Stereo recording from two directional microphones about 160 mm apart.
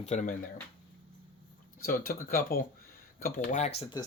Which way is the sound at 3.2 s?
55° left (ahead or behind).